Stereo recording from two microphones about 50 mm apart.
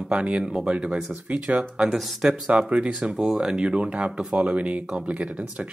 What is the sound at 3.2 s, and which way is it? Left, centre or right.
Speech, centre.